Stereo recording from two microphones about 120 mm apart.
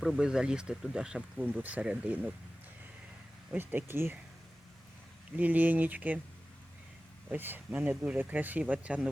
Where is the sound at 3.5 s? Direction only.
15° right (ahead or behind).